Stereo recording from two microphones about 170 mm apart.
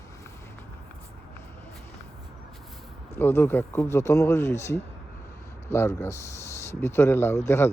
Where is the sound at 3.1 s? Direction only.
10° left (ahead or behind).